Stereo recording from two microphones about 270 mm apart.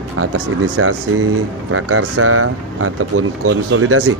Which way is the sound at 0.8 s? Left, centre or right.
Right.